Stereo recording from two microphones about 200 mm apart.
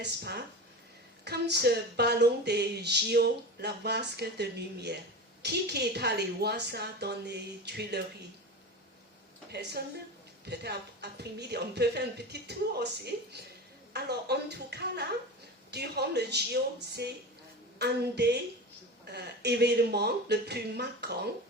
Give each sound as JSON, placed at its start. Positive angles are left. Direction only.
{"t": 0.0, "sound": "speech", "side_deg": -55}
{"t": 9.5, "sound": "speech", "side_deg": -55}